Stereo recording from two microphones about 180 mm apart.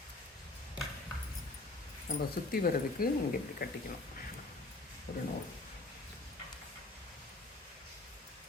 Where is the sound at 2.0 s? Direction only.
55° left (ahead or behind).